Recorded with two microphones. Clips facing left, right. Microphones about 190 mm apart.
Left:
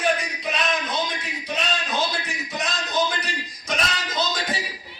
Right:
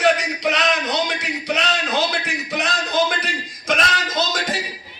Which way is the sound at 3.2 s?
90° right.